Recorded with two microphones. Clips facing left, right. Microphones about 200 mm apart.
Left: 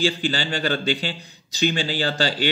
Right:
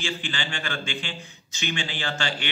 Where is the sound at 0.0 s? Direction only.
40° left (ahead or behind).